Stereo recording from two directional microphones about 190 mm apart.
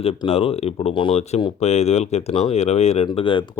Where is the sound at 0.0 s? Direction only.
30° left (ahead or behind).